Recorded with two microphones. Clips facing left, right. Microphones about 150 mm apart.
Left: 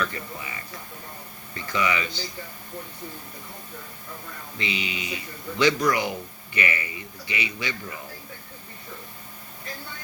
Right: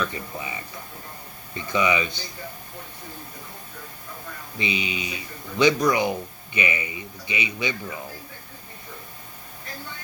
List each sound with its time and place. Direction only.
0.0 s a man's voice: 20° right (ahead or behind)
4.5 s a man's voice: 20° right (ahead or behind)